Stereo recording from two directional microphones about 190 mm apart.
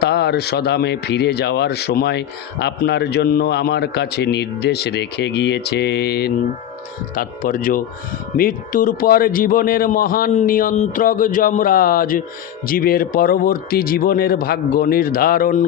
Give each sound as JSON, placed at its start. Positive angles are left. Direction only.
{"t": 0.0, "sound": "speech", "side_deg": 60}